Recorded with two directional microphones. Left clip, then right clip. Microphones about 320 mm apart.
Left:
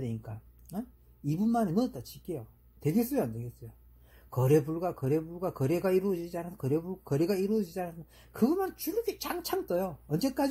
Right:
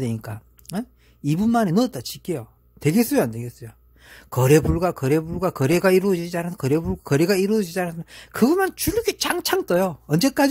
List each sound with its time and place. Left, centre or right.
0.0 s a man's voice: right